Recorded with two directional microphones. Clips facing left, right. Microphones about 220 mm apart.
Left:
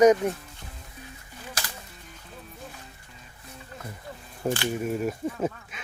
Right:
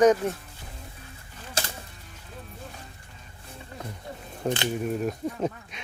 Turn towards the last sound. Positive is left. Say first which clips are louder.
# even
turn(degrees=5)  # may be behind; listen again after turning